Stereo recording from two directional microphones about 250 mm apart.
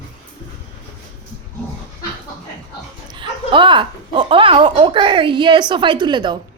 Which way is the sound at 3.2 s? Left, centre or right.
Centre.